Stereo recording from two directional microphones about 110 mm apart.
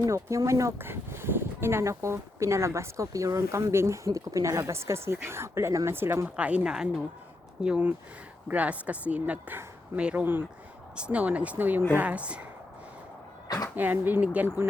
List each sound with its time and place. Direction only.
0.0 s speech: 30° right (ahead or behind); by 12.5 s 10° right (ahead or behind)
13.7 s speech: 15° right (ahead or behind)